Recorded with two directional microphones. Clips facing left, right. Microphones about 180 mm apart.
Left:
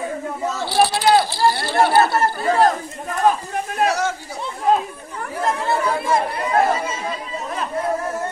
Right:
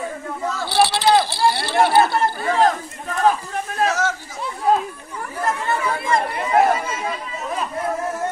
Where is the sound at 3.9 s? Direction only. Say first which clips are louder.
Left 1 dB; 15° left (ahead or behind).